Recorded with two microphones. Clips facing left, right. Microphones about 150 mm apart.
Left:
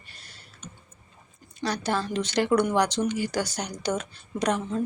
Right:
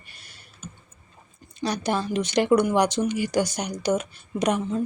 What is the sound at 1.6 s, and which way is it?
Speech, 15° right (ahead or behind).